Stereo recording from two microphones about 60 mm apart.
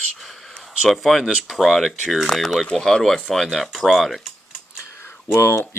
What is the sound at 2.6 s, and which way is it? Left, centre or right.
Speech, centre.